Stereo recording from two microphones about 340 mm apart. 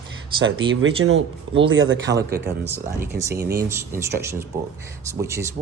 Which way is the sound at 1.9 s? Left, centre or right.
Right.